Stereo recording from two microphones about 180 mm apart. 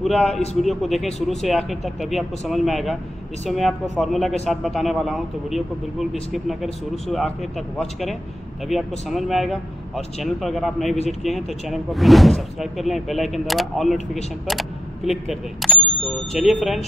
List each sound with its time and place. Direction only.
0.0 s speech: centre (ahead or behind)